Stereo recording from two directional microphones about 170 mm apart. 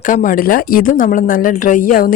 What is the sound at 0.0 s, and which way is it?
Speech, 50° left (ahead or behind).